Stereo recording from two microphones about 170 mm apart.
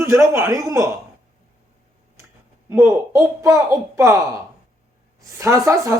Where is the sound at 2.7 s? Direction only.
15° right (ahead or behind).